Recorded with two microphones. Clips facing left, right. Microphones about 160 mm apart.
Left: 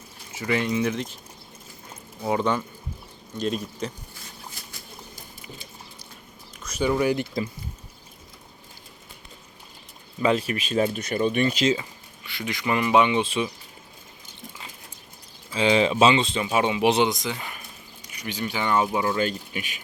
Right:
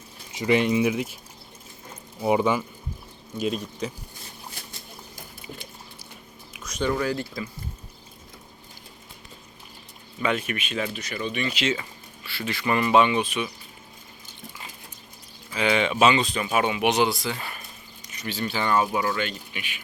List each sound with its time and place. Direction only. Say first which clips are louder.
0.3 s speech: right 4 dB; 20° right (ahead or behind)
2.2 s speech: right 2 dB; 10° right (ahead or behind)
6.5 s speech: left 2 dB; centre (ahead or behind); by 7.4 s 20° left (ahead or behind)
10.2 s speech: left 4 dB; 30° left (ahead or behind)
11.8 s speech: even; 15° left (ahead or behind)
15.5 s speech: left 3 dB; 30° left (ahead or behind)
19.1 s speech: left 4 dB; 40° left (ahead or behind)